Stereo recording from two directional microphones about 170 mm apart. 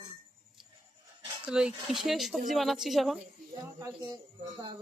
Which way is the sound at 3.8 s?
20° right (ahead or behind).